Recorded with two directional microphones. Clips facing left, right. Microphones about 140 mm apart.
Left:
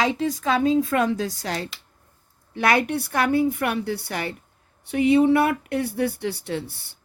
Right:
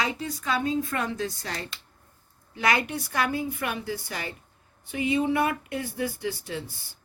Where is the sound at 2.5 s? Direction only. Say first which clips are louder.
Left 5 dB; 60° left (ahead or behind).